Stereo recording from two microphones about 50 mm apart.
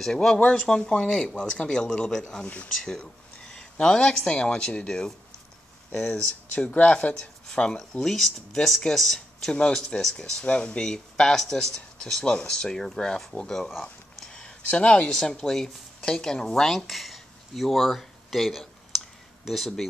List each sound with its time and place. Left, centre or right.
0.0 s speech: centre
2.4 s speech: left
2.7 s speech: centre
4.3 s speech: centre
9.5 s speech: centre
14.3 s a sound: left
15.1 s speech: centre